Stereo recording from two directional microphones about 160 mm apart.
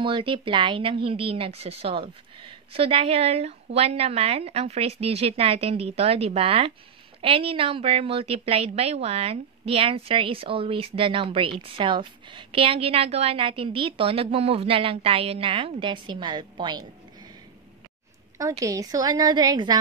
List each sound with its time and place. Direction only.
0.0 s a woman's voice: 30° right (ahead or behind)
18.4 s a woman's voice: 20° right (ahead or behind)